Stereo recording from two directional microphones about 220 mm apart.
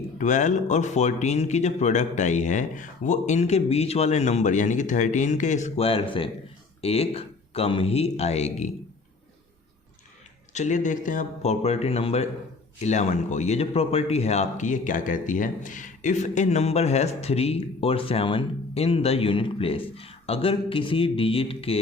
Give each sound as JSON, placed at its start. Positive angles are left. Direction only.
{"t": 0.2, "sound": "a man's voice", "side_deg": 35}
{"t": 10.5, "sound": "a man's voice", "side_deg": 30}